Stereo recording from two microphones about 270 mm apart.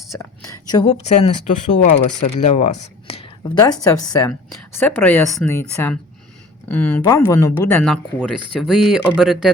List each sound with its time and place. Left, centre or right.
0.1 s speech: centre
1.5 s speech: left
2.5 s speech: left; by 9.5 s centre